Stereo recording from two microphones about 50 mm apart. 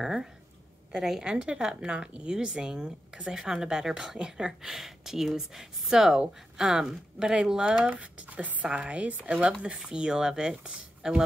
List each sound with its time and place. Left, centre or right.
0.0 s a woman's voice: centre
4.6 s a woman's voice: centre